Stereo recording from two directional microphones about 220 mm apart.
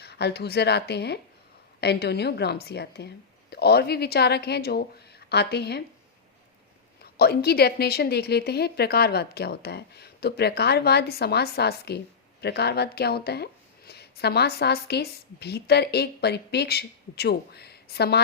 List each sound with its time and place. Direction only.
0.0 s a woman's voice: 50° left (ahead or behind)
7.0 s a woman's voice: 45° left (ahead or behind)